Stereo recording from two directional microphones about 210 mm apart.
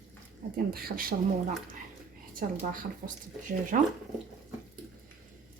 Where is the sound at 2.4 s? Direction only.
40° right (ahead or behind).